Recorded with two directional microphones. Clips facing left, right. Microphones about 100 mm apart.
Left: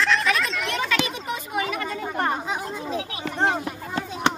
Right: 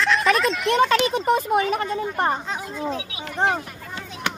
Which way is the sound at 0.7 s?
35° right (ahead or behind).